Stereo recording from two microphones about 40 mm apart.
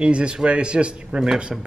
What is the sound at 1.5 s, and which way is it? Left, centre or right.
Speech, centre.